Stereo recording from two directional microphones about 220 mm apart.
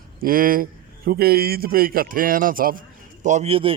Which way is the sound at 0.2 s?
40° right (ahead or behind).